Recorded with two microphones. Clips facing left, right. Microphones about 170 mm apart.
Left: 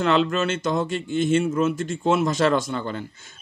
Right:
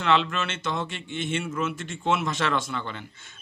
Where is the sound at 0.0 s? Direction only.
40° left (ahead or behind).